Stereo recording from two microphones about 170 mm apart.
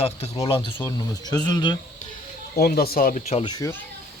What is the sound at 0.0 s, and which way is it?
Speech, 35° left (ahead or behind).